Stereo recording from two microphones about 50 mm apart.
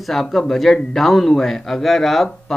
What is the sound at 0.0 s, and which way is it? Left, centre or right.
Speech, centre.